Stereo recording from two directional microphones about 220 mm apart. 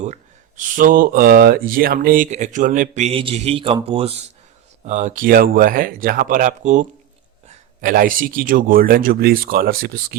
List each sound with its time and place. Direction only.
0.0 s speech: 35° right (ahead or behind)